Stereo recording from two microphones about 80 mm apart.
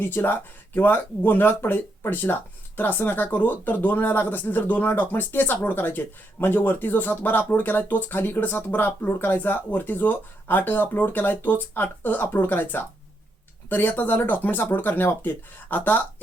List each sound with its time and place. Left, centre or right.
0.0 s speech: left